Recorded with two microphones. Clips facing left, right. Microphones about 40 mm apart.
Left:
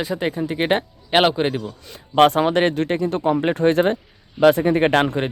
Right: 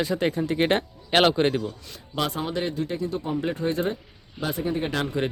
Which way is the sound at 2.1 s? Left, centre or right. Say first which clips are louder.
Left 12 dB; left.